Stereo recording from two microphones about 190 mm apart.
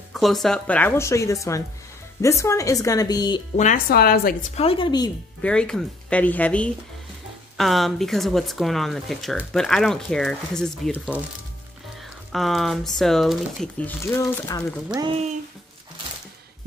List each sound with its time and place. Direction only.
0.1 s a woman's voice: centre (ahead or behind); by 3.4 s 20° left (ahead or behind)
3.5 s a woman's voice: 45° left (ahead or behind)
4.6 s a woman's voice: 30° left (ahead or behind)
5.4 s a woman's voice: 5° left (ahead or behind)
12.3 s speech: centre (ahead or behind); by 14.6 s 15° left (ahead or behind)
14.9 s speech: 25° right (ahead or behind)